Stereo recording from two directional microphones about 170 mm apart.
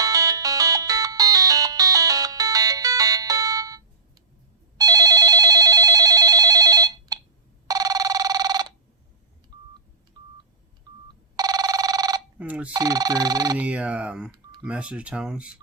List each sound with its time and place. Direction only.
0.0 s ringtone: 20° right (ahead or behind)
4.8 s telephone bell ringing: 20° right (ahead or behind)
9.5 s telephone dialing: 25° right (ahead or behind)
11.3 s telephone bell ringing: 20° right (ahead or behind)
12.4 s telephone bell ringing: 10° right (ahead or behind)
12.7 s speech: 20° right (ahead or behind)
13.6 s speech: 10° right (ahead or behind)